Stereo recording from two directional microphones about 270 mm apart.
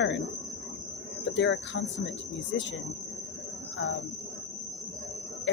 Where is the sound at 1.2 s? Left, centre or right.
Left.